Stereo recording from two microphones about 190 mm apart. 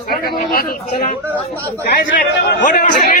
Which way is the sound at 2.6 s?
45° left (ahead or behind).